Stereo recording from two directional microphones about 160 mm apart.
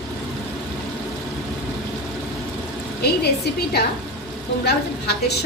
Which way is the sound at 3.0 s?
90° left.